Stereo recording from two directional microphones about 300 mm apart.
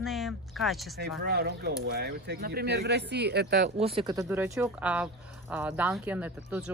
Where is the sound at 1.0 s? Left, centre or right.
Right.